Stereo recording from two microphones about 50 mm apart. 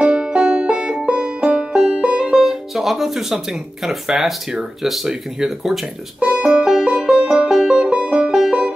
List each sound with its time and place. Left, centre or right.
0.0 s banjo: centre
2.4 s speech: centre
6.1 s music: right